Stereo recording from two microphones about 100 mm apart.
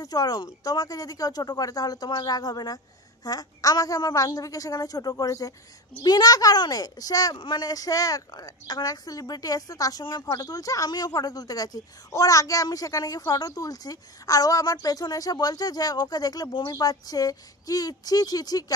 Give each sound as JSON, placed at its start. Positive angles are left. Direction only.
{"t": 0.0, "sound": "a woman's voice", "side_deg": 40}